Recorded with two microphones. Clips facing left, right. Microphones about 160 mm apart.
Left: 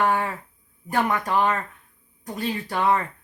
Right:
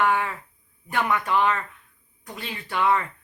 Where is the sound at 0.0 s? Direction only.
40° left (ahead or behind).